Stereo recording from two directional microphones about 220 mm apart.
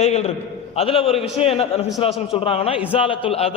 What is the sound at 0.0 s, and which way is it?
A man's voice, 30° left (ahead or behind).